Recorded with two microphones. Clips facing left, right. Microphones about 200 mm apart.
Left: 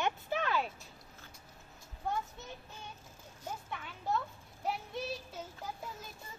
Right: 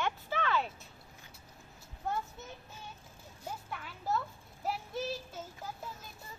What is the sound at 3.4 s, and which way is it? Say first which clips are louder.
Speech: even; 5° right (ahead or behind).